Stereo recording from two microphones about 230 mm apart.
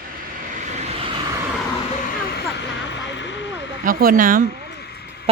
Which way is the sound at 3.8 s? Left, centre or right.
Right.